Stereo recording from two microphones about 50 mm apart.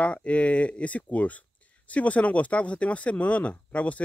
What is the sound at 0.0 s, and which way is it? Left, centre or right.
Speech, left.